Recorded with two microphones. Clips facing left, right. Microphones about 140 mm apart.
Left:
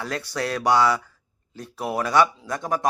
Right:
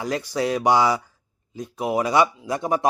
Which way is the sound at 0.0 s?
20° right (ahead or behind).